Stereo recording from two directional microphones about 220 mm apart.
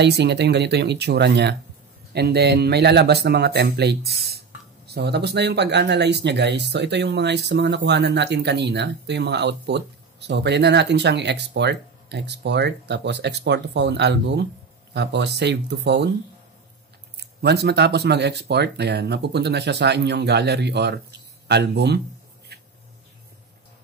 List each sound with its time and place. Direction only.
0.0 s speech: 50° right (ahead or behind)
17.2 s speech: 50° right (ahead or behind)
22.5 s a sound: 45° right (ahead or behind)